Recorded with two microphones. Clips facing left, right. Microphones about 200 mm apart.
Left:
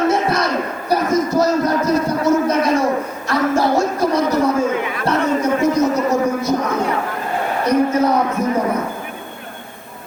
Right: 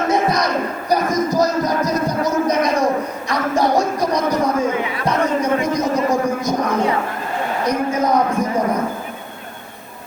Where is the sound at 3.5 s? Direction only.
15° right (ahead or behind).